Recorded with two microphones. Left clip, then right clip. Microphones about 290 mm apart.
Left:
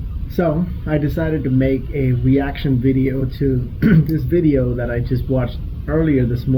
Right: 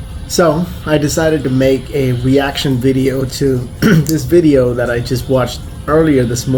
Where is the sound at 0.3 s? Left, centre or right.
Centre.